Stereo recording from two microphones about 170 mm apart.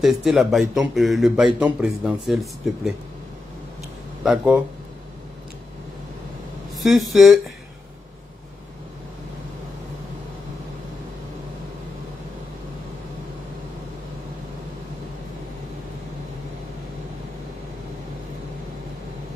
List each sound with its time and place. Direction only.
0.0 s speech: centre (ahead or behind)
4.2 s speech: centre (ahead or behind)
6.8 s speech: centre (ahead or behind)